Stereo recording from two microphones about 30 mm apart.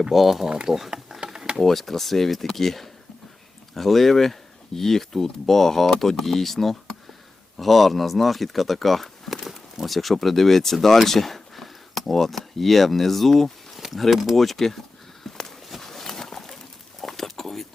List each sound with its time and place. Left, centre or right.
0.1 s speech: centre
1.2 s a sound: right
1.5 s speech: centre
15.3 s walk: centre
15.8 s horse: centre
17.0 s a sound: centre